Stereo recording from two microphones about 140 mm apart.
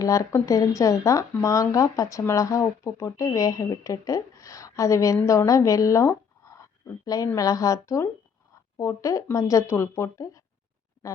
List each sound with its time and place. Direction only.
0.0 s speech: 20° left (ahead or behind)